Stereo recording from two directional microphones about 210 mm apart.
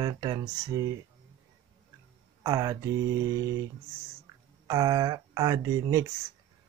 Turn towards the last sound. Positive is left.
turn(degrees=-15)  # may be behind; listen again after turning